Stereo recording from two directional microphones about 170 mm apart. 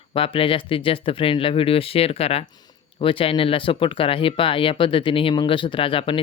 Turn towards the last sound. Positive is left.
turn(degrees=30)  # may be behind; listen again after turning